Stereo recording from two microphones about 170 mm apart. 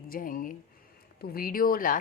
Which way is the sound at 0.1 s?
55° left (ahead or behind).